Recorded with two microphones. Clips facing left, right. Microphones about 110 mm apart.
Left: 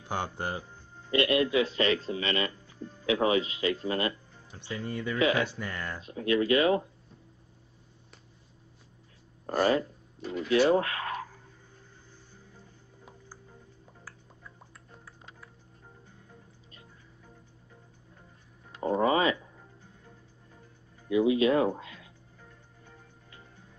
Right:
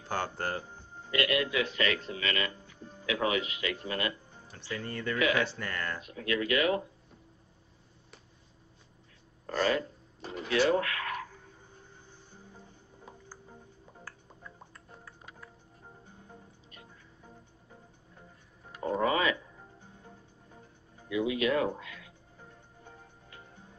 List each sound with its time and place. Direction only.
0.0 s speech: 15° left (ahead or behind)
1.1 s speech: 30° left (ahead or behind)
5.9 s speech: 30° left (ahead or behind)
9.5 s speech: 35° left (ahead or behind)
10.2 s speech: 35° right (ahead or behind)
10.5 s speech: 30° left (ahead or behind)
18.8 s a sound: 30° left (ahead or behind)
21.1 s speech: 30° left (ahead or behind)